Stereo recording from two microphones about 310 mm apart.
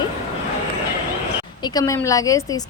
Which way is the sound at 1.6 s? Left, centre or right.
Centre.